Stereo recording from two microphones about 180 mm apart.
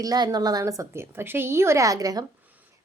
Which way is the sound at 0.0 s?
20° right (ahead or behind).